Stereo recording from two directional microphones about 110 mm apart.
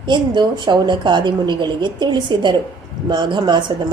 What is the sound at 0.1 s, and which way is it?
A woman's voice, 45° right (ahead or behind).